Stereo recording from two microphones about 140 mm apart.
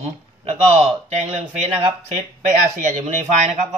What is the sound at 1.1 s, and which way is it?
Speech, 55° right (ahead or behind).